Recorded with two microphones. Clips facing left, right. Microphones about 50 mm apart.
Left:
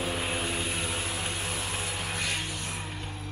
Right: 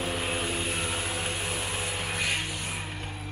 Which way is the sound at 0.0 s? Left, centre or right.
Centre.